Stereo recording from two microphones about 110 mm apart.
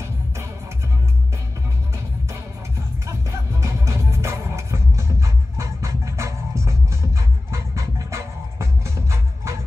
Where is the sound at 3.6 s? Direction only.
25° right (ahead or behind).